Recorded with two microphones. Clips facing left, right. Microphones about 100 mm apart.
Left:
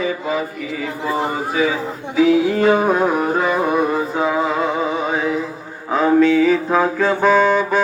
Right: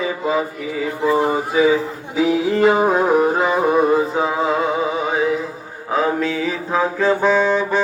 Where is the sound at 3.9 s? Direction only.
10° right (ahead or behind).